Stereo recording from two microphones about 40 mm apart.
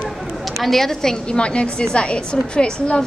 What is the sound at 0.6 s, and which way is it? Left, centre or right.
Speech, centre.